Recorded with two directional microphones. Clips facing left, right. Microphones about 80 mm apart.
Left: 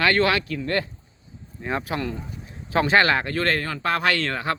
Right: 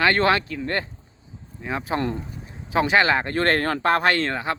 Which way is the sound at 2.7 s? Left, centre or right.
Centre.